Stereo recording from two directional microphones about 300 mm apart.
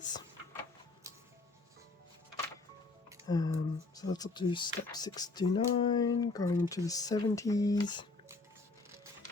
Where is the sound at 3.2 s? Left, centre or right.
Centre.